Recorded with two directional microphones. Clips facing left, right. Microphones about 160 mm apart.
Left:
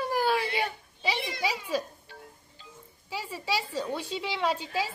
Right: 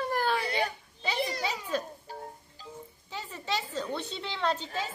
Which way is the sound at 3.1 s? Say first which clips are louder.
Left 2 dB; 10° left (ahead or behind).